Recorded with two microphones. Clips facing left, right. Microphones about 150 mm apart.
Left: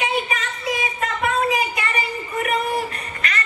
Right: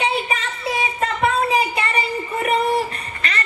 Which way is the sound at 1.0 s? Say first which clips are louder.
Right 3 dB; 30° right (ahead or behind).